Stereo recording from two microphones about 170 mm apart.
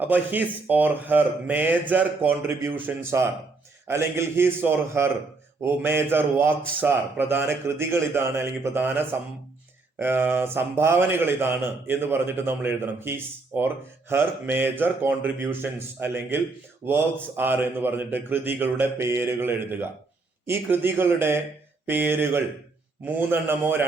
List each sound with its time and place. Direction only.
0.0 s a man's voice: 10° right (ahead or behind)